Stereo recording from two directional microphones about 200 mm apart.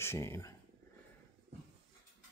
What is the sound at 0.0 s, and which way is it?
Speech, 15° left (ahead or behind).